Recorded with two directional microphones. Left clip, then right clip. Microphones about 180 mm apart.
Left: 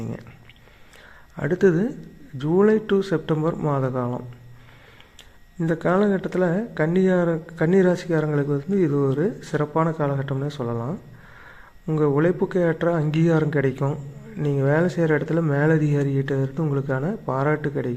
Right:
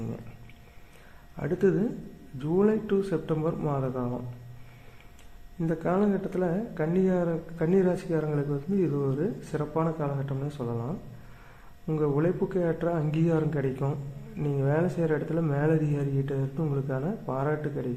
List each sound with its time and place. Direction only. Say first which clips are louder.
1.4 s speech: left 6 dB; 20° left (ahead or behind)
5.5 s speech: left 6 dB; 20° left (ahead or behind)